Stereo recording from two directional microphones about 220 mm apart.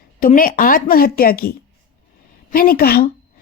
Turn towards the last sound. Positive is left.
turn(degrees=45)  # may be behind; listen again after turning